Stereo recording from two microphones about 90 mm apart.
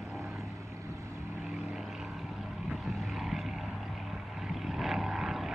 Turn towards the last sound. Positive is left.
turn(degrees=-5)  # may be behind; listen again after turning